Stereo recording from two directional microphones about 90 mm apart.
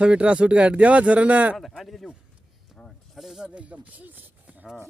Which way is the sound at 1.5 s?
Centre (ahead or behind).